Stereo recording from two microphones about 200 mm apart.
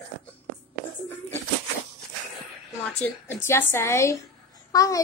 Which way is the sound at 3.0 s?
10° left (ahead or behind).